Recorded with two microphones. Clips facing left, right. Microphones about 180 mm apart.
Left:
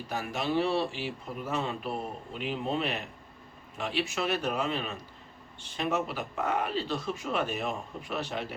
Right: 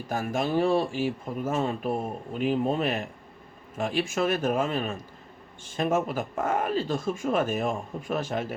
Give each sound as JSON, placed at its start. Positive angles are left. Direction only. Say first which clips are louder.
{"t": 0.1, "sound": "speech", "louder": "right 4 dB", "side_deg": -45}